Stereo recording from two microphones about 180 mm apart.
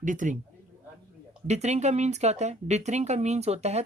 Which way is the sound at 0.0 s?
45° right (ahead or behind).